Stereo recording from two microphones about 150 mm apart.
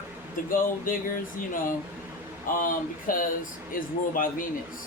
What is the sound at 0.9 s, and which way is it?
Speech, 70° left (ahead or behind).